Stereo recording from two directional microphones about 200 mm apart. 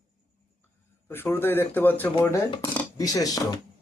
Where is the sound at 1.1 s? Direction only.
10° left (ahead or behind).